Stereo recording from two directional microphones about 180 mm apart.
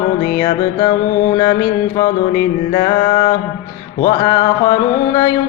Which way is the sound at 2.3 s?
25° left (ahead or behind).